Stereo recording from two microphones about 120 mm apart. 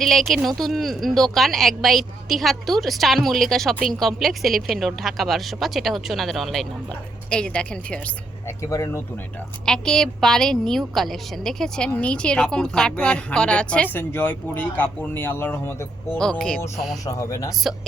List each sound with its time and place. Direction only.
0.0 s a woman's voice: centre (ahead or behind)
8.7 s speech: 25° left (ahead or behind)
9.6 s a woman's voice: 5° left (ahead or behind)
16.1 s a woman's voice: 5° left (ahead or behind)
17.1 s speech: 30° left (ahead or behind)